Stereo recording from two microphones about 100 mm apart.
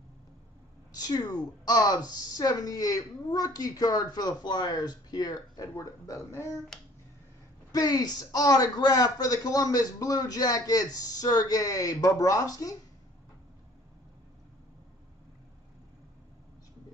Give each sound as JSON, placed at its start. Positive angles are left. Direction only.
{"t": 0.9, "sound": "a man's voice", "side_deg": 40}
{"t": 7.7, "sound": "a man's voice", "side_deg": 40}